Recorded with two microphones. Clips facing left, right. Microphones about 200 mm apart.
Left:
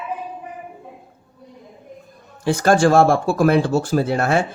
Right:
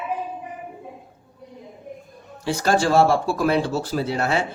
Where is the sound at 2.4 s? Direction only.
50° left (ahead or behind).